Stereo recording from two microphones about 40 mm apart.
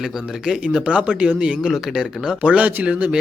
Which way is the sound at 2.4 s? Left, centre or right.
Right.